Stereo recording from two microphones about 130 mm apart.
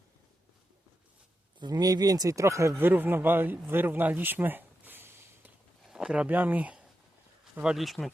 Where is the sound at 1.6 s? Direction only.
30° right (ahead or behind).